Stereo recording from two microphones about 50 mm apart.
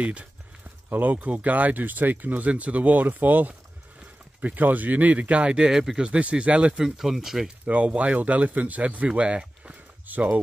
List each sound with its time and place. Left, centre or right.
0.0 s speech: right
0.8 s speech: right
5.7 s speech: centre
6.0 s speech: right
6.8 s speech: centre
7.6 s speech: right
10.0 s speech: right